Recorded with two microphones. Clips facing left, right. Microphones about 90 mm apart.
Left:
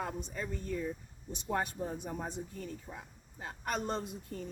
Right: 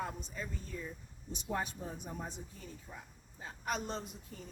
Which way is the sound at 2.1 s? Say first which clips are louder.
Left 5 dB; 55° left (ahead or behind).